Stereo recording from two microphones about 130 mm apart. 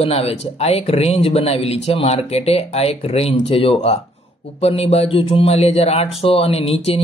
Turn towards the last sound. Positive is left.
turn(degrees=50)  # may be behind; listen again after turning